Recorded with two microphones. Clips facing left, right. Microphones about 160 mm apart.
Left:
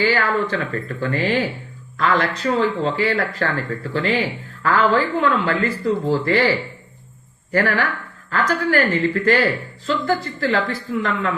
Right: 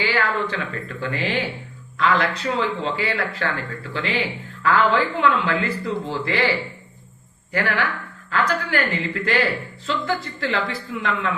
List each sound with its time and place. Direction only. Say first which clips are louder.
0.0 s speech: left 4 dB; 45° left (ahead or behind)
7.5 s speech: left 4 dB; 40° left (ahead or behind)